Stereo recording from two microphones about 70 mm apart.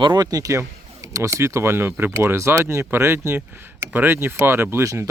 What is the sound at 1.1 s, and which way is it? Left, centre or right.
Speech, right.